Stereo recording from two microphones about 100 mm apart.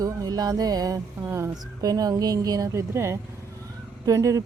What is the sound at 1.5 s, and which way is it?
Speech, 40° right (ahead or behind).